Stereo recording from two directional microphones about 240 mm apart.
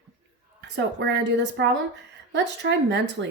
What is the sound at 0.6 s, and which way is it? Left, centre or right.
Speech, right.